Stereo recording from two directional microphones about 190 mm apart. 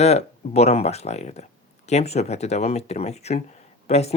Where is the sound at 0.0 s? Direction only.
35° left (ahead or behind).